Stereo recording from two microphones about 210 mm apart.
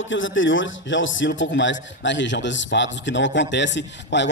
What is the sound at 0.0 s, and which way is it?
A man's voice, 65° left (ahead or behind).